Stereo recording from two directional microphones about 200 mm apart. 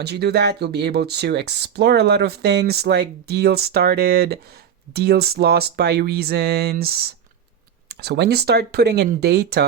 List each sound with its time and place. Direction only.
0.0 s speech: 55° right (ahead or behind)